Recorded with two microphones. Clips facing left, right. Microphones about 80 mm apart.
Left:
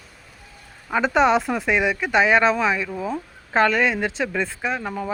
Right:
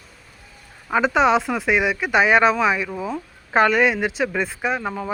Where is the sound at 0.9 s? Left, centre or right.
Centre.